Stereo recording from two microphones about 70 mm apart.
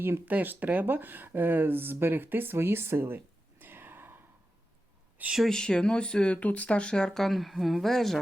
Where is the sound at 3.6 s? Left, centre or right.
Right.